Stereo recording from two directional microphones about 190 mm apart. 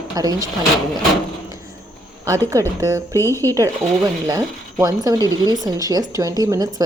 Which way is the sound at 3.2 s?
15° left (ahead or behind).